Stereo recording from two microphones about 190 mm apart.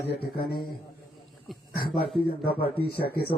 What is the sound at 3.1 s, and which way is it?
Speech, 55° left (ahead or behind).